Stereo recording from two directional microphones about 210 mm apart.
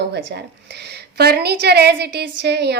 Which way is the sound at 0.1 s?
55° right (ahead or behind).